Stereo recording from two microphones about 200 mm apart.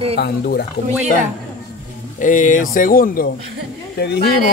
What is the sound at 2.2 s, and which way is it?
Speech, 40° left (ahead or behind).